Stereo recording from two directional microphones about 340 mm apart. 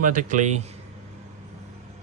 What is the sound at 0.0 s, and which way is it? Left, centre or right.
Speech, right.